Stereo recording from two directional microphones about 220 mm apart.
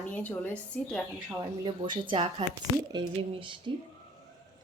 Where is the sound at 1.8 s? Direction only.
20° right (ahead or behind).